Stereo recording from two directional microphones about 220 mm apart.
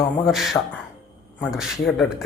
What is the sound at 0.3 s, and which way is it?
Speech, centre (ahead or behind).